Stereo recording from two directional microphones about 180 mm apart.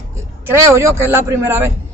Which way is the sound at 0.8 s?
15° right (ahead or behind).